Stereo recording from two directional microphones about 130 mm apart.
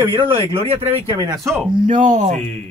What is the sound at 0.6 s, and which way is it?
Speech, 45° right (ahead or behind).